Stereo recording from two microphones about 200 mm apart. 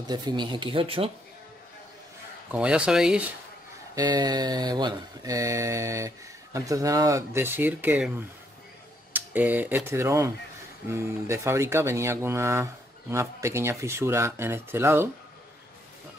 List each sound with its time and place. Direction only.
0.1 s speech: 20° right (ahead or behind)
2.5 s speech: 5° right (ahead or behind)
3.9 s mantra: 20° right (ahead or behind)
9.1 s speech: 10° right (ahead or behind)
10.9 s mantra: 15° right (ahead or behind)